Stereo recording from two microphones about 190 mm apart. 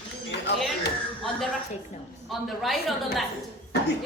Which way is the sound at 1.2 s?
Centre (ahead or behind).